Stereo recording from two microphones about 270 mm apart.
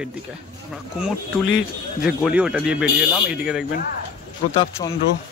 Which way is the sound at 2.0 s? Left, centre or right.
Centre.